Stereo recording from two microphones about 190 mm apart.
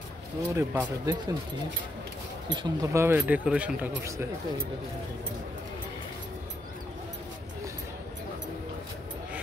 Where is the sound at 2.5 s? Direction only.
20° right (ahead or behind).